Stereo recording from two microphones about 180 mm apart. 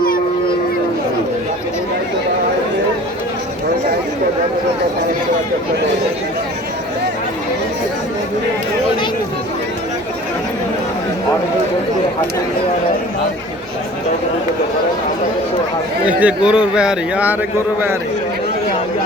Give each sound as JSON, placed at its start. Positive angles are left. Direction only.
{"t": 16.0, "sound": "speech", "side_deg": -5}